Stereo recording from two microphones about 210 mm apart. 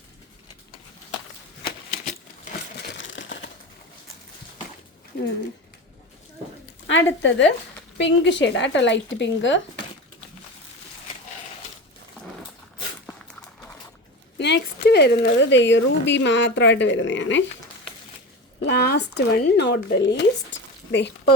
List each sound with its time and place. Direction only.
3.0 s crushing: 60° left (ahead or behind)
5.1 s speech: 55° left (ahead or behind)
6.8 s speech: 60° left (ahead or behind)
14.3 s speech: 55° left (ahead or behind)
18.6 s speech: 50° left (ahead or behind)